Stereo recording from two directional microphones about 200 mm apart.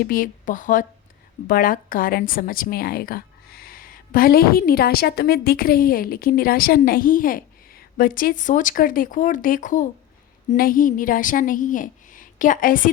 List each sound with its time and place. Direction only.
0.0 s a woman's voice: 45° left (ahead or behind)